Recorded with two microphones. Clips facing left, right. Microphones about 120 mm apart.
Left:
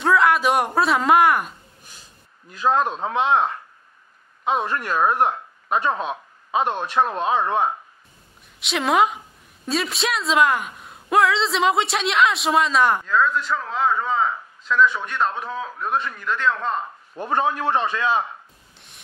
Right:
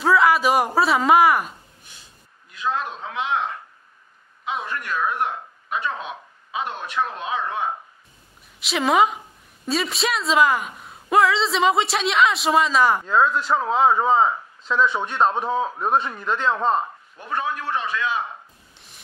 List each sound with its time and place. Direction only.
0.0 s a sound: centre (ahead or behind)
2.5 s speech: 40° left (ahead or behind)
4.6 s speech: 35° left (ahead or behind)
8.5 s a woman's voice: centre (ahead or behind)
13.0 s a man's voice: 35° right (ahead or behind)
17.1 s speech: 35° left (ahead or behind)